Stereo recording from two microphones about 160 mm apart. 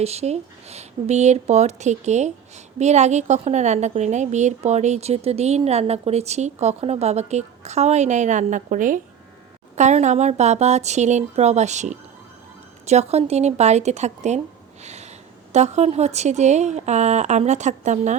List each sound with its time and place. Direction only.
0.0 s a woman's voice: 40° right (ahead or behind)
14.8 s sniff: 45° right (ahead or behind)
15.5 s a woman's voice: 45° right (ahead or behind)